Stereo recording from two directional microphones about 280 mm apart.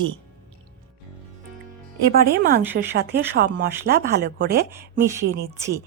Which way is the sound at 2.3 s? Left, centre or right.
Right.